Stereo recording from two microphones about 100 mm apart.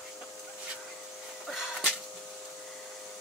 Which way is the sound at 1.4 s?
5° right (ahead or behind).